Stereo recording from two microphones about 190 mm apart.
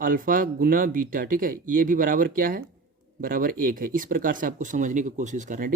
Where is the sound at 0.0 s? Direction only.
45° right (ahead or behind).